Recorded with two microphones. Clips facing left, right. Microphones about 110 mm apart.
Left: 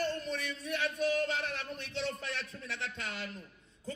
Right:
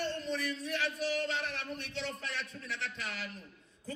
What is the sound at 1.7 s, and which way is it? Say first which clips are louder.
Speech: left 2 dB; 25° left (ahead or behind).